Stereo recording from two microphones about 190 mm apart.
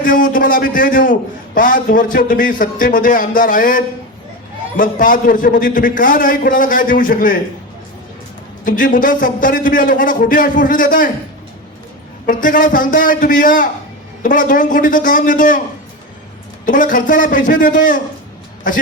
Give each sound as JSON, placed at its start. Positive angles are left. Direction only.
{"t": 0.0, "sound": "a sound", "side_deg": 45}
{"t": 1.5, "sound": "a man's voice", "side_deg": 45}
{"t": 8.6, "sound": "a man's voice", "side_deg": 45}
{"t": 12.2, "sound": "a man's voice", "side_deg": 45}
{"t": 16.6, "sound": "a man's voice", "side_deg": 45}